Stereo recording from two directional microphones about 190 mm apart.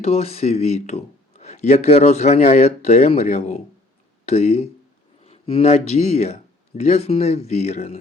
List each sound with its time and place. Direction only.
0.0 s speech: 35° left (ahead or behind)